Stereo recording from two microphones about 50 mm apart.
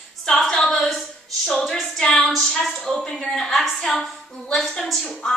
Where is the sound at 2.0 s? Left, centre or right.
Centre.